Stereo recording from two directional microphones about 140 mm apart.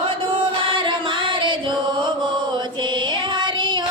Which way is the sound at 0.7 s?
35° right (ahead or behind).